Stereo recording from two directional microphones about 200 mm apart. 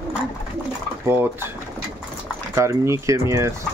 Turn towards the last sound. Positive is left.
turn(degrees=-15)  # may be behind; listen again after turning